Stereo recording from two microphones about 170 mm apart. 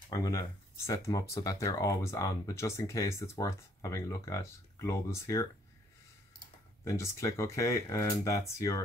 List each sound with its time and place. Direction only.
0.1 s speech: 20° left (ahead or behind)
6.8 s speech: 20° left (ahead or behind)